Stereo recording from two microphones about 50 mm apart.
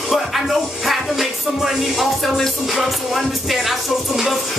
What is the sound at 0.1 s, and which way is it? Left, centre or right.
Music, centre.